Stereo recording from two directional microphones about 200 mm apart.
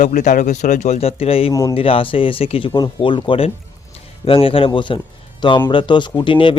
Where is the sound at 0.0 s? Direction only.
40° left (ahead or behind).